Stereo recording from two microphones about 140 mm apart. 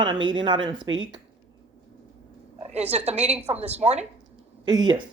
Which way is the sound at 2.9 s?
50° right (ahead or behind).